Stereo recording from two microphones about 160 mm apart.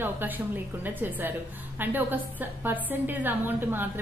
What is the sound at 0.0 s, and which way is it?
A woman's voice, 10° right (ahead or behind).